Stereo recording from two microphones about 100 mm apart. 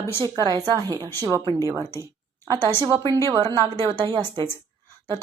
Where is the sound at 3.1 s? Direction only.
35° right (ahead or behind).